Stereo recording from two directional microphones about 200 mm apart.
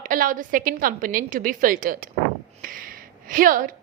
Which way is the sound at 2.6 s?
45° right (ahead or behind).